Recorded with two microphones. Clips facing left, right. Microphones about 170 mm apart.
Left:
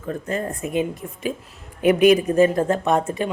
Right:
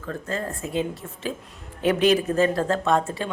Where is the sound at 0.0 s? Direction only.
20° left (ahead or behind).